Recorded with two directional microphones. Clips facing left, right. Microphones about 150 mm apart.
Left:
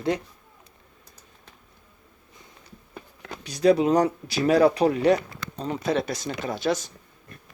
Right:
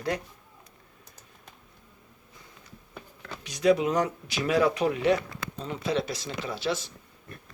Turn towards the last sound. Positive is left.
turn(degrees=45)  # may be behind; listen again after turning